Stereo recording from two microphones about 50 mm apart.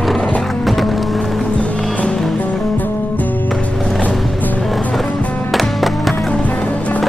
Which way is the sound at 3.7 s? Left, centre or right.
Centre.